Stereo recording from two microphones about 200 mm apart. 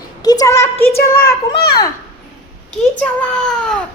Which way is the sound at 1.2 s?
50° left (ahead or behind).